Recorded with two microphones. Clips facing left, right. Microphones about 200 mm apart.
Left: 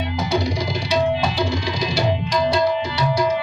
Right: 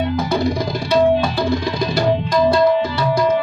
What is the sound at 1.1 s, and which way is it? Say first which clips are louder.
Tabla: right 4 dB; 55° right (ahead or behind).